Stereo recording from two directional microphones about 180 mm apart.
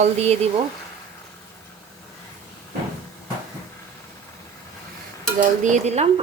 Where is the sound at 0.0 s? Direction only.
35° right (ahead or behind).